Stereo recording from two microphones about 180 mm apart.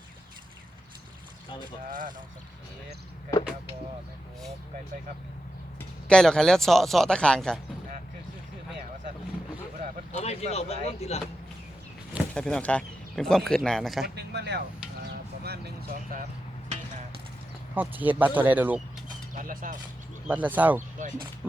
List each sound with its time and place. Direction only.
1.9 s speech: 50° right (ahead or behind)
6.1 s speech: 5° left (ahead or behind)
10.1 s speech: 35° left (ahead or behind)
12.3 s speech: 5° left (ahead or behind)
14.2 s speech: 70° right (ahead or behind)
15.4 s a sound: 60° right (ahead or behind)
17.7 s speech: 10° right (ahead or behind)
19.3 s speech: 50° right (ahead or behind)
20.2 s speech: 10° right (ahead or behind)